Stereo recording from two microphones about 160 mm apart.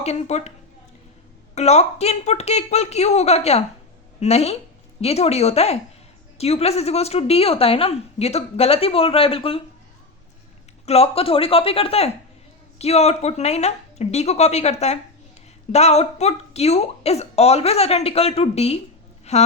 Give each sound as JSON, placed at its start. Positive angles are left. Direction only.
{"t": 0.0, "sound": "speech", "side_deg": 40}
{"t": 1.5, "sound": "speech", "side_deg": 45}
{"t": 10.8, "sound": "speech", "side_deg": 40}